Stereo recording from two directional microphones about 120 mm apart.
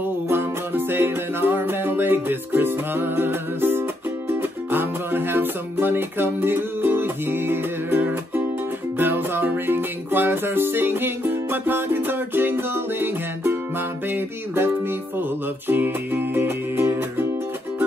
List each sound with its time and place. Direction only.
0.3 s music: 20° right (ahead or behind)
15.7 s music: 15° right (ahead or behind)